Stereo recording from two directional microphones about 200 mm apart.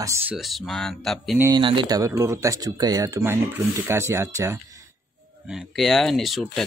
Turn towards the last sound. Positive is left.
turn(degrees=0)  # may be behind; listen again after turning